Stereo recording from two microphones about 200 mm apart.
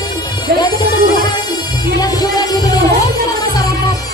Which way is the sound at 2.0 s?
20° left (ahead or behind).